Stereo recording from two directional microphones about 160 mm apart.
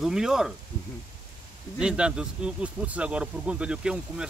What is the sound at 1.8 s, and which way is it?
Speech, 5° right (ahead or behind).